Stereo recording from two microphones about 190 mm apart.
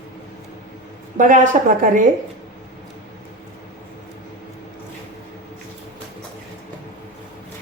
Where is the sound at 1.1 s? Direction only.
45° right (ahead or behind).